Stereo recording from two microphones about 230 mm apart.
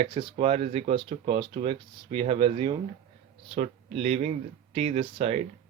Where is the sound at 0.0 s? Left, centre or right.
Right.